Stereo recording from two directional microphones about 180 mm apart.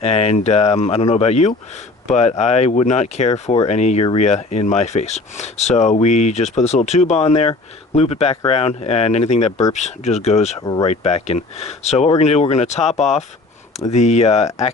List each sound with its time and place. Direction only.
0.0 s speech: 35° left (ahead or behind)